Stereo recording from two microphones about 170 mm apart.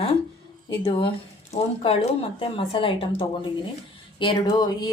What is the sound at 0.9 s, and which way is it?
A woman's voice, 35° left (ahead or behind).